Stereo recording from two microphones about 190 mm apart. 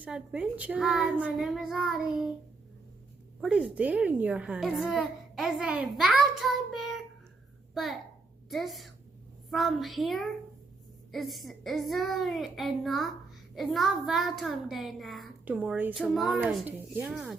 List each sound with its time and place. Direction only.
0.0 s a child's voice: 5° right (ahead or behind)
3.4 s a child's voice: 5° right (ahead or behind)